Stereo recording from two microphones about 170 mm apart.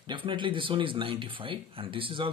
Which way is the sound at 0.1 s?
30° right (ahead or behind).